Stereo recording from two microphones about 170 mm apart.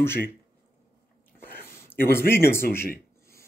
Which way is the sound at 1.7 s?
15° left (ahead or behind).